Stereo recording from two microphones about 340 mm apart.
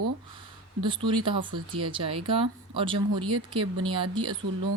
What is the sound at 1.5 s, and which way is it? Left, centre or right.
Speech, right.